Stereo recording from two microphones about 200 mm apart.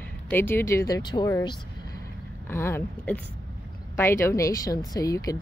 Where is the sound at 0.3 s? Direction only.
10° left (ahead or behind).